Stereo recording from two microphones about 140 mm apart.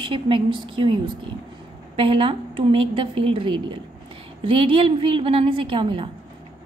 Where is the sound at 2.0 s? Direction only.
40° right (ahead or behind).